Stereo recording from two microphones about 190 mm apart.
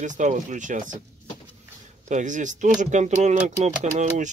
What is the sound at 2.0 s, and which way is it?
Speech, 40° right (ahead or behind).